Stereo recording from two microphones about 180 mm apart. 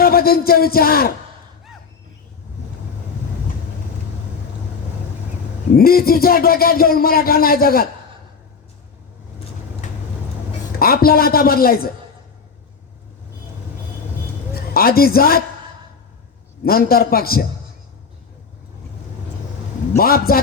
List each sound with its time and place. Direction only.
0.0 s a man's voice: 55° left (ahead or behind)
5.7 s a man's voice: 55° left (ahead or behind)
10.8 s a man's voice: 55° left (ahead or behind)
14.5 s a woman's voice: 55° left (ahead or behind)
16.6 s a man's voice: 55° left (ahead or behind)
20.0 s a man's voice: 55° left (ahead or behind)